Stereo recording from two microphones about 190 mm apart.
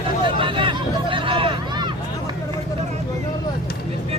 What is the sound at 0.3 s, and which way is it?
Hubbub, 25° right (ahead or behind).